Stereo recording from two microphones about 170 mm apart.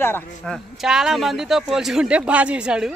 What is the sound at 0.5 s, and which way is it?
A man's voice, centre (ahead or behind).